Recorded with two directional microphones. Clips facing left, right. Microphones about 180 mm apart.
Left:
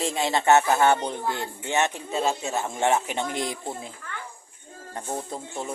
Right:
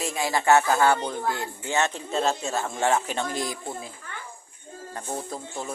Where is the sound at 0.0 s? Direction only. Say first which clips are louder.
Left 1 dB; 25° left (ahead or behind).